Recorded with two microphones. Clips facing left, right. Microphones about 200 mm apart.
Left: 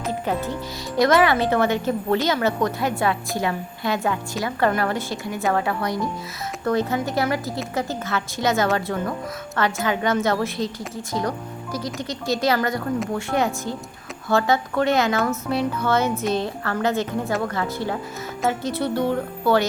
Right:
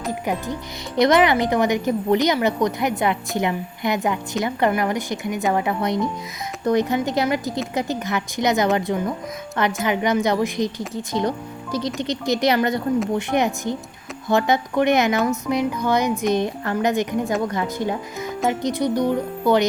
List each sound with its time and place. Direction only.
0.1 s a woman's voice: 15° right (ahead or behind)